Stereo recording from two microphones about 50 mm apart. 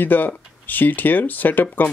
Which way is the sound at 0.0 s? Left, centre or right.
Left.